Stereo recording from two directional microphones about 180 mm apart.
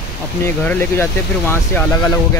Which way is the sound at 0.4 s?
10° left (ahead or behind).